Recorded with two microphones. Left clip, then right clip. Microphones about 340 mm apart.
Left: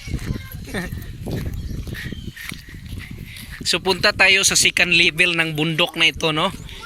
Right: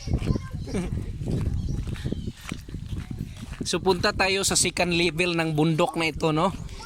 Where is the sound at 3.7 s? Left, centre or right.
Centre.